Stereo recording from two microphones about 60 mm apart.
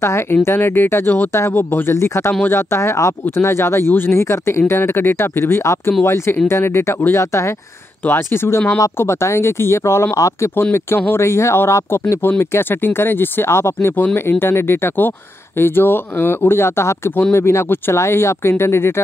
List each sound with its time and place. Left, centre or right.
0.0 s speech: left
3.3 s speech: left
8.0 s speech: left
10.1 s speech: left
10.5 s speech: left
12.2 s speech: left